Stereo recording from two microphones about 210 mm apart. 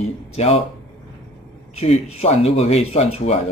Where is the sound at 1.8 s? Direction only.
30° left (ahead or behind).